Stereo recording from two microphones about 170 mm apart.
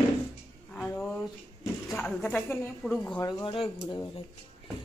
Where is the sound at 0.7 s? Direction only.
10° left (ahead or behind).